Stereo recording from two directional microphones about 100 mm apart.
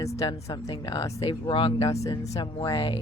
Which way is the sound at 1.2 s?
60° left (ahead or behind).